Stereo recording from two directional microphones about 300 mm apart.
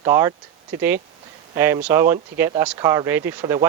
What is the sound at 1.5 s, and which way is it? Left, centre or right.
Speech, centre.